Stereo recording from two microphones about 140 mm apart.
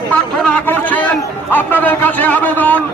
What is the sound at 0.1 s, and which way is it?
Chatter, 10° left (ahead or behind).